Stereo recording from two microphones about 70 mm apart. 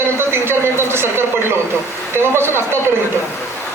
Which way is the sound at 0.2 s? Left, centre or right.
Right.